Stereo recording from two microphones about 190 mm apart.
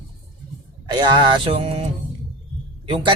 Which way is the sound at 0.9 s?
25° right (ahead or behind).